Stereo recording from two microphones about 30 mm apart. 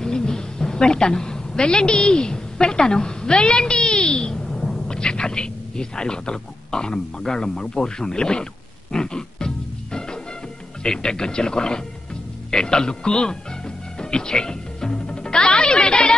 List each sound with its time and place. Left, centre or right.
0.0 s a woman's voice: left
8.9 s music: left
10.8 s speech: left
13.9 s music: left